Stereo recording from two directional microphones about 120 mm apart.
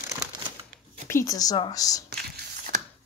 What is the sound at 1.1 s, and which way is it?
Speech, 25° left (ahead or behind).